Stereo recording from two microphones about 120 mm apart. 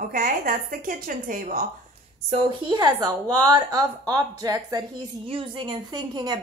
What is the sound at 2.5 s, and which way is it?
Speech, 35° right (ahead or behind).